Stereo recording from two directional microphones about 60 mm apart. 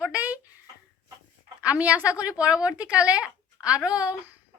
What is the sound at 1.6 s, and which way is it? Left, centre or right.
A woman's voice, right.